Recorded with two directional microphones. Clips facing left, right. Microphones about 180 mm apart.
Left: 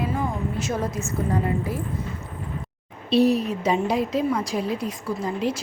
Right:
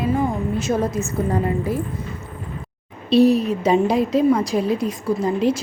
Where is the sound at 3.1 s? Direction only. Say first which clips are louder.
Right 4 dB; 35° right (ahead or behind).